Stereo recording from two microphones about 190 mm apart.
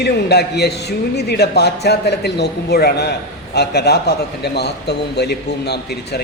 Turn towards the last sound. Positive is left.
turn(degrees=60)  # may be behind; listen again after turning